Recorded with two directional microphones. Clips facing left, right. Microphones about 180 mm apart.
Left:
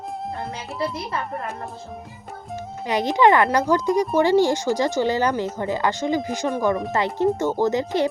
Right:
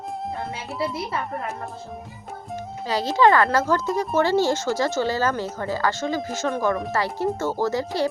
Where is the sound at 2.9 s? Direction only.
20° left (ahead or behind).